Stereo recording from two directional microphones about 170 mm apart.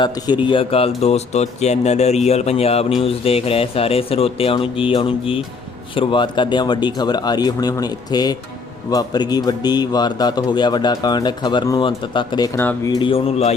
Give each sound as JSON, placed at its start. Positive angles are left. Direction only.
{"t": 0.4, "sound": "speech", "side_deg": 30}
{"t": 12.5, "sound": "speech", "side_deg": 15}